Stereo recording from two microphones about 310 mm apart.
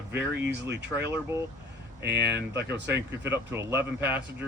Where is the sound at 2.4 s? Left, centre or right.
Right.